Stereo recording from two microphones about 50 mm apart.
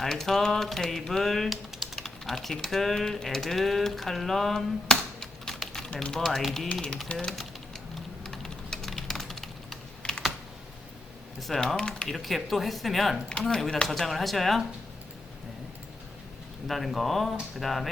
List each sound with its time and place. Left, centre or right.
0.0 s typing: centre
2.0 s speech: centre
5.5 s typing: centre
5.9 s speech: centre
6.1 s typing: centre
7.1 s speech: left
8.2 s typing: centre
10.0 s typing: left
11.3 s speech: centre
11.8 s speech: centre
12.0 s typing: centre
13.4 s speech: centre
13.8 s typing: centre
16.6 s typing: centre